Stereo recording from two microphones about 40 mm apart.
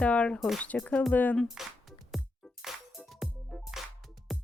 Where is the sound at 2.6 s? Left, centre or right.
Centre.